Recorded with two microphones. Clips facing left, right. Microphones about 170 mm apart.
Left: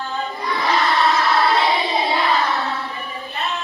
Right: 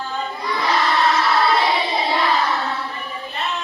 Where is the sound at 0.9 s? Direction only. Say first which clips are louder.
Even; centre (ahead or behind).